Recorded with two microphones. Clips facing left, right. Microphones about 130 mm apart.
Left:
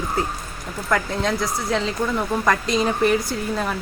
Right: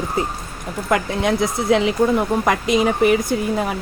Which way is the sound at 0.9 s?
15° right (ahead or behind).